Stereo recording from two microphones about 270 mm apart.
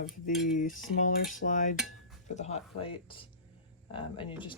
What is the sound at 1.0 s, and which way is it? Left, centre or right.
Cutlery, left.